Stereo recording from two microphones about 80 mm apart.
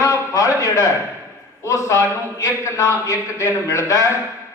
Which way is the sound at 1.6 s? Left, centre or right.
Left.